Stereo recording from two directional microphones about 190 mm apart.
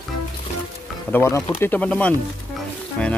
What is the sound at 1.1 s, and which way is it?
Speech, 15° left (ahead or behind).